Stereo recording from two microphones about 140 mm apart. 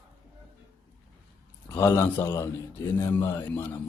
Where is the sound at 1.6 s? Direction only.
20° left (ahead or behind).